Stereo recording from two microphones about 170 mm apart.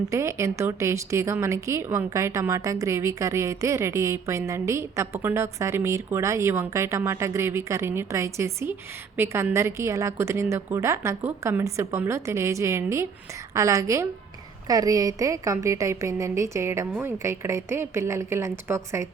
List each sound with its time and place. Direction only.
0.1 s a woman's voice: 15° right (ahead or behind)